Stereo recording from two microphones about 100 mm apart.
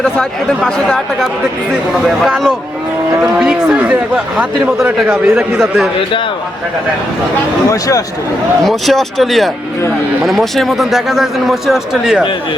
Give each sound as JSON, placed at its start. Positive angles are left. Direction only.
{"t": 0.0, "sound": "a man's voice", "side_deg": 5}
{"t": 7.7, "sound": "speech", "side_deg": 35}
{"t": 8.6, "sound": "a man's voice", "side_deg": 0}